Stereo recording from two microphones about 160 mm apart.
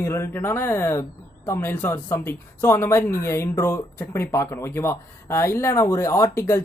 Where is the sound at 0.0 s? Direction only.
15° left (ahead or behind).